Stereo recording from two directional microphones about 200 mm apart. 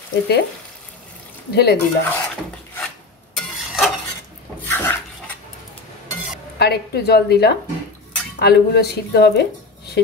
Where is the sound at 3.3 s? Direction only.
Centre (ahead or behind).